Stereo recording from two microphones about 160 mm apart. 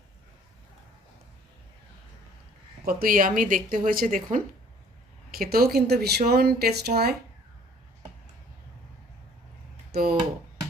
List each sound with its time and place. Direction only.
2.8 s speech: 60° right (ahead or behind)
5.3 s speech: 70° right (ahead or behind)
9.9 s speech: 80° right